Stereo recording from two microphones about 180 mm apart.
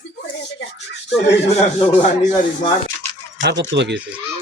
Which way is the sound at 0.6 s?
70° left (ahead or behind).